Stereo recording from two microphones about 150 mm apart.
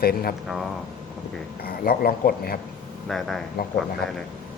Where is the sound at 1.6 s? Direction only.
85° left.